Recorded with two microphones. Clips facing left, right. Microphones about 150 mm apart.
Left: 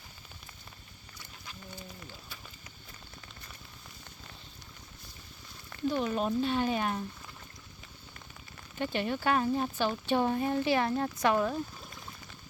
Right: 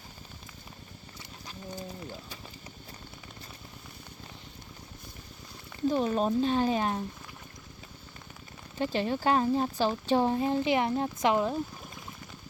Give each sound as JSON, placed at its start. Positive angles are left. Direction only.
{"t": 5.9, "sound": "speech", "side_deg": -35}
{"t": 8.8, "sound": "a woman's voice", "side_deg": -30}